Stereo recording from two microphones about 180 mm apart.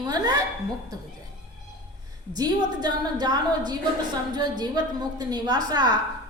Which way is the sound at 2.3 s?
20° right (ahead or behind).